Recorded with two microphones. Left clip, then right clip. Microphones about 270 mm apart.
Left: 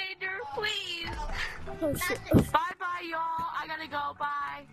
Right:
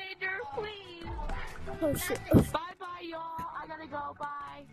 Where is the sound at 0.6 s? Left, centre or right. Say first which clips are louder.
Left 7 dB; left.